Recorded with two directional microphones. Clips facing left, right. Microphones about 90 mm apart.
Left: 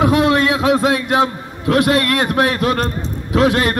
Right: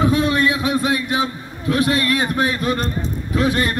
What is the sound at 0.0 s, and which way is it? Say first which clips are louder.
A man's voice: left 3 dB; 80° left.